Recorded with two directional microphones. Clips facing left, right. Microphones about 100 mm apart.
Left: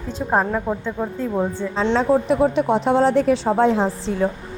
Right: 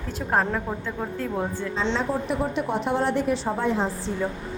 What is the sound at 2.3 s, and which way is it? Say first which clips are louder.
A woman's voice: left 8 dB; 90° left.